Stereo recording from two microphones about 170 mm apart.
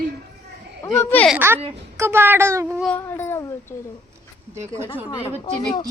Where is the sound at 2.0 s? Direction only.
15° right (ahead or behind).